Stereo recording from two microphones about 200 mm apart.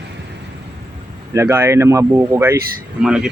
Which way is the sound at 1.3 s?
15° right (ahead or behind).